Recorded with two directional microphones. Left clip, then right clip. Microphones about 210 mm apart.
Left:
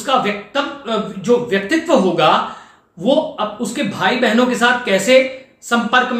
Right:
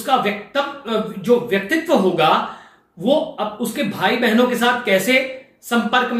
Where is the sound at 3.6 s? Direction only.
15° left (ahead or behind).